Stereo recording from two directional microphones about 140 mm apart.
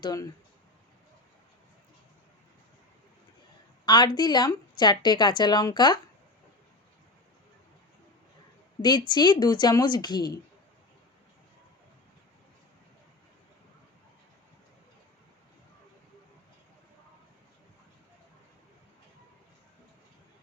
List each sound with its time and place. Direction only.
0.0 s speech: 25° left (ahead or behind)
3.8 s a woman's voice: 35° left (ahead or behind)
8.8 s a woman's voice: 30° left (ahead or behind)